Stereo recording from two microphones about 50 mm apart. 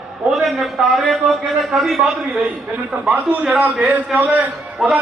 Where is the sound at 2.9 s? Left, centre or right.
Right.